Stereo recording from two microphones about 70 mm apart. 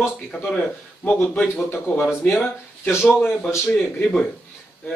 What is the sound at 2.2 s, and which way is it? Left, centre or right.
Speech, left.